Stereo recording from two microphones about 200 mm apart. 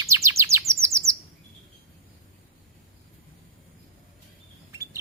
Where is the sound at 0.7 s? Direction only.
15° right (ahead or behind).